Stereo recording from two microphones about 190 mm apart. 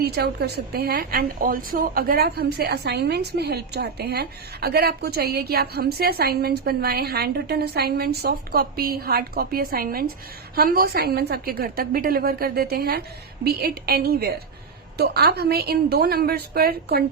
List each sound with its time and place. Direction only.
0.0 s a woman's voice: 55° right (ahead or behind)